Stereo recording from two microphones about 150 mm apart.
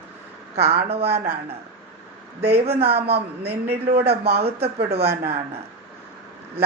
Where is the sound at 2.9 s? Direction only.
90° right.